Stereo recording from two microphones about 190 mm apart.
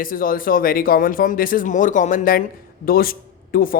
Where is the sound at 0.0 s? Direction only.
45° left (ahead or behind).